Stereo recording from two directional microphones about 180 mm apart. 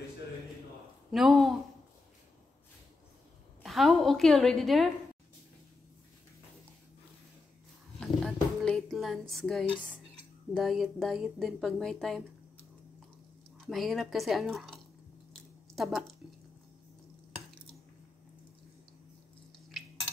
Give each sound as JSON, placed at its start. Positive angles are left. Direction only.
{"t": 1.1, "sound": "a woman's voice", "side_deg": 0}
{"t": 3.6, "sound": "a woman's voice", "side_deg": 0}
{"t": 8.0, "sound": "a sound", "side_deg": 0}
{"t": 10.5, "sound": "a woman's voice", "side_deg": 0}
{"t": 13.6, "sound": "a woman's voice", "side_deg": 0}